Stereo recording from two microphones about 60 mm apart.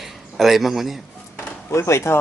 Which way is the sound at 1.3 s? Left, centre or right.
Left.